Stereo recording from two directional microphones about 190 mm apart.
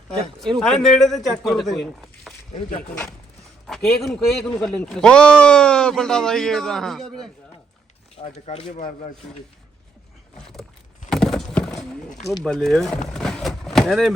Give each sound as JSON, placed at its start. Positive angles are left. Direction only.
{"t": 0.1, "sound": "speech", "side_deg": 0}
{"t": 2.5, "sound": "speech", "side_deg": 35}
{"t": 3.7, "sound": "speech", "side_deg": 0}
{"t": 8.1, "sound": "speech", "side_deg": 35}
{"t": 10.4, "sound": "vehicle", "side_deg": 0}
{"t": 11.1, "sound": "clip-clop", "side_deg": 0}
{"t": 12.4, "sound": "speech", "side_deg": 0}
{"t": 13.1, "sound": "vehicle", "side_deg": 0}